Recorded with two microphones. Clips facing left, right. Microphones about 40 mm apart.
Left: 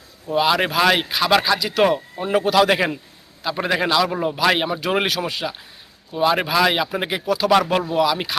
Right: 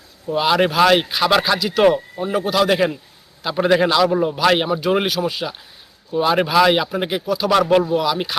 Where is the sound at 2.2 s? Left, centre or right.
Centre.